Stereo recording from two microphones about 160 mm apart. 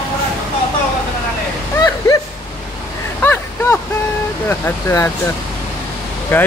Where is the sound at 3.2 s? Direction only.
15° left (ahead or behind).